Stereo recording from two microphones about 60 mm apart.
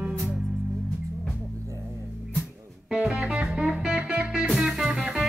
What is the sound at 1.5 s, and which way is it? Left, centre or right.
Music, right.